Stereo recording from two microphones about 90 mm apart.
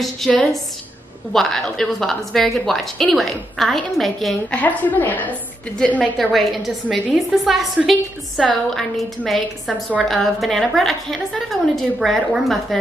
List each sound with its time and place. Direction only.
0.3 s a woman's voice: 5° left (ahead or behind)
4.5 s a woman's voice: 15° left (ahead or behind)
6.1 s a woman's voice: centre (ahead or behind)